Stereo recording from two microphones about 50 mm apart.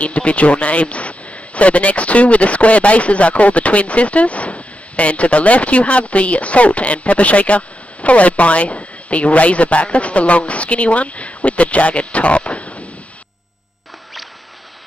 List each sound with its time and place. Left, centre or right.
0.0 s speech: left